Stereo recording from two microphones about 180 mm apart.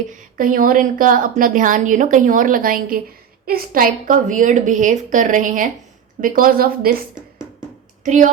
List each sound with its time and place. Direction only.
0.1 s a woman's voice: 50° right (ahead or behind)
8.0 s speech: 45° right (ahead or behind)